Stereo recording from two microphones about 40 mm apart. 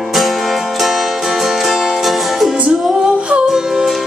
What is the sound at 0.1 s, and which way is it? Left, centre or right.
Music, centre.